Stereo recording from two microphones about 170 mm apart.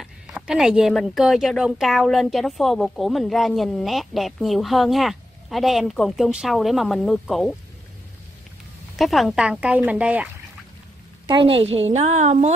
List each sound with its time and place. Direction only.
0.0 s a woman's voice: 5° right (ahead or behind)
8.9 s speech: centre (ahead or behind)
11.2 s a woman's voice: 30° right (ahead or behind)